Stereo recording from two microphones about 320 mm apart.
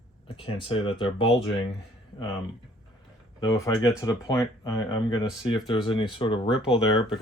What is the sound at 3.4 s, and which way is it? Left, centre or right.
Speech, centre.